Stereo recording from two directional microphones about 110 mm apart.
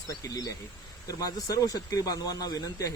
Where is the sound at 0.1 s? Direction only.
35° left (ahead or behind).